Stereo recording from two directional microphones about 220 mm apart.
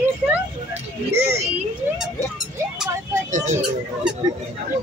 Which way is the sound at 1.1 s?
10° right (ahead or behind).